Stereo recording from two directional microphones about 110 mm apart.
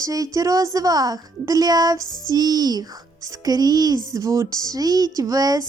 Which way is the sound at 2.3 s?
35° right (ahead or behind).